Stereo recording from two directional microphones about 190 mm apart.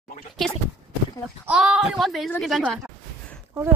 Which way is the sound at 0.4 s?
5° left (ahead or behind).